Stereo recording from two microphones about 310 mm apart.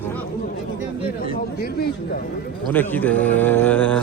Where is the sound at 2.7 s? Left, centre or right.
Centre.